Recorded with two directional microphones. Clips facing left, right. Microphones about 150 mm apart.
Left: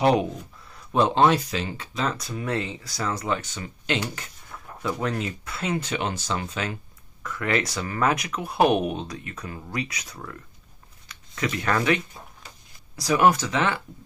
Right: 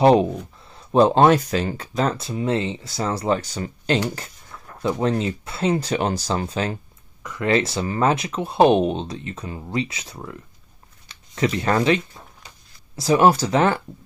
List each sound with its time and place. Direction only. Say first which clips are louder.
0.0 s speech: right 6 dB; 30° right (ahead or behind)
0.7 s a sound: right 6 dB; 30° right (ahead or behind)
1.2 s speech: right 4 dB; 50° right (ahead or behind)
2.1 s speech: right 5 dB; 25° right (ahead or behind)
7.2 s speech: right 5 dB; 25° right (ahead or behind); by 13.8 s 40° right (ahead or behind)